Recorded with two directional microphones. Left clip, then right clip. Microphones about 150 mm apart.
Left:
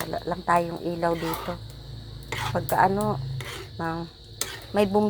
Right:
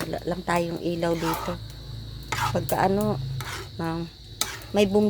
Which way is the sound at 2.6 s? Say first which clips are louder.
Left 4 dB; 25° right (ahead or behind).